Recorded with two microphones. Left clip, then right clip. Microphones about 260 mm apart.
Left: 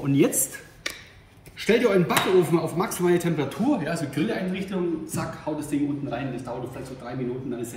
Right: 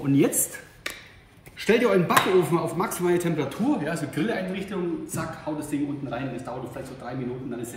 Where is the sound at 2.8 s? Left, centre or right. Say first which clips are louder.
Left 1 dB; centre.